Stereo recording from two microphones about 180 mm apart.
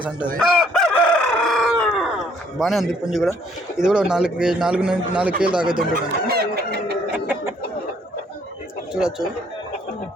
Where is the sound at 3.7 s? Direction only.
5° right (ahead or behind).